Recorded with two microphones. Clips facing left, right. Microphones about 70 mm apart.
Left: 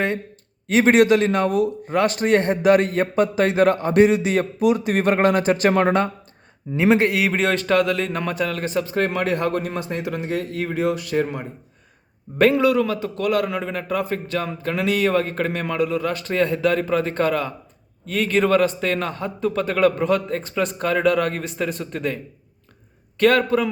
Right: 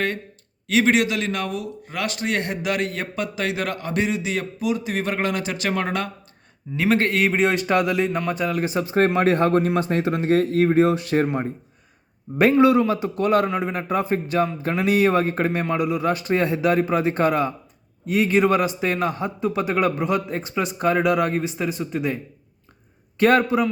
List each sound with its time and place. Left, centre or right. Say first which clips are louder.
0.7 s a man's voice: left 4 dB; left
6.7 s a man's voice: left 2 dB; centre; by 11.3 s right
12.4 s a man's voice: right 1 dB; right
23.1 s a man's voice: even; centre